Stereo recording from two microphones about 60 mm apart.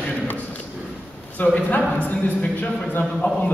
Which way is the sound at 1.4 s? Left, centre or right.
Left.